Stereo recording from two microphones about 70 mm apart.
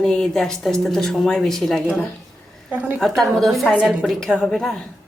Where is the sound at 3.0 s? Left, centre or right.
Centre.